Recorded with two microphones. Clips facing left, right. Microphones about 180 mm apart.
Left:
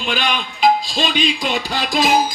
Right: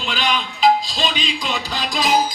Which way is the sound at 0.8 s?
10° left (ahead or behind).